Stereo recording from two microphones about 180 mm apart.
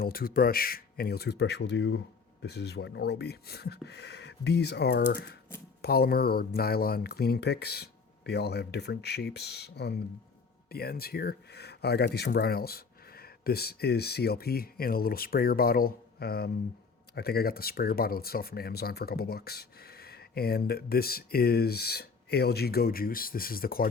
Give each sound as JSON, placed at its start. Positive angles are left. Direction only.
{"t": 0.0, "sound": "speech", "side_deg": 55}